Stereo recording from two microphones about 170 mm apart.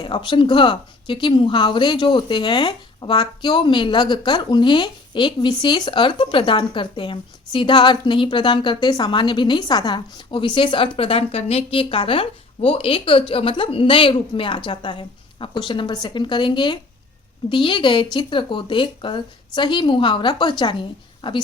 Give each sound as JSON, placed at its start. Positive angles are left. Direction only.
{"t": 0.0, "sound": "speech", "side_deg": 30}